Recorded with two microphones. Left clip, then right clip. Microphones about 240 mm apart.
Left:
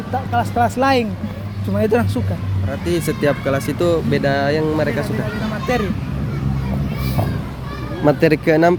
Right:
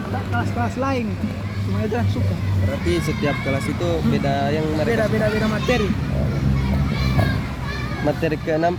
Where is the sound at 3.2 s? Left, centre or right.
Left.